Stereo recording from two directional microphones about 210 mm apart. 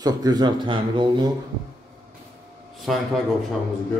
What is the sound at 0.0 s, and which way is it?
Speech, 20° right (ahead or behind).